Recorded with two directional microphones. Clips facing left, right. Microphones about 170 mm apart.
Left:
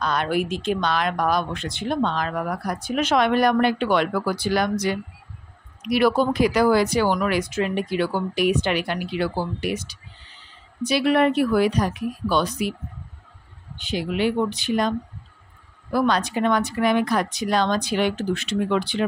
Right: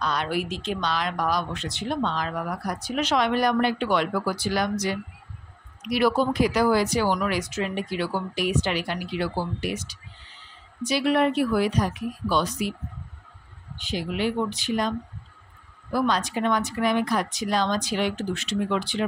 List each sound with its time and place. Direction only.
0.0 s speech: 50° left (ahead or behind)
13.7 s speech: 65° left (ahead or behind)